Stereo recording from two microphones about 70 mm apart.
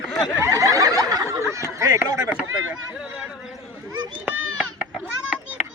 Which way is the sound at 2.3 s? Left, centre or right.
Centre.